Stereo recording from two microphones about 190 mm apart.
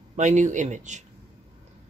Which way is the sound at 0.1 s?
40° right (ahead or behind).